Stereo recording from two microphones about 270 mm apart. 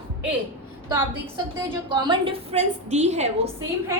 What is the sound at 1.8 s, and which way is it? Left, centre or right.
A woman's voice, centre.